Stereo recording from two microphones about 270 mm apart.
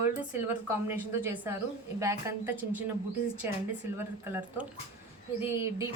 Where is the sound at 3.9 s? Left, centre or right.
Centre.